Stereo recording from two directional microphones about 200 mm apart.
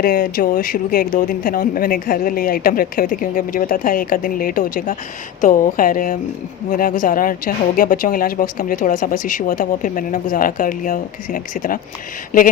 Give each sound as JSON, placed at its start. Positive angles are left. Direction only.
{"t": 0.0, "sound": "speech", "side_deg": 45}